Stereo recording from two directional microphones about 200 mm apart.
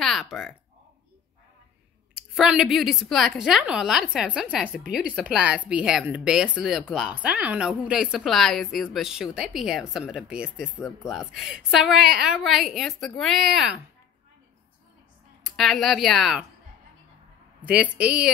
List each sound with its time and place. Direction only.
0.0 s speech: centre (ahead or behind)
2.3 s speech: centre (ahead or behind)
15.4 s speech: centre (ahead or behind)
17.6 s speech: 5° right (ahead or behind)